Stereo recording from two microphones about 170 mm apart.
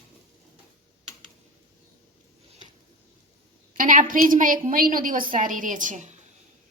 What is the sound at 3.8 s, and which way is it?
A woman's voice, 55° right (ahead or behind).